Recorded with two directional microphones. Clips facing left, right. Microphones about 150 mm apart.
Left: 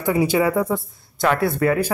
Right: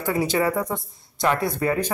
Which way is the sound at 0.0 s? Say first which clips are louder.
Left 4 dB; 10° left (ahead or behind).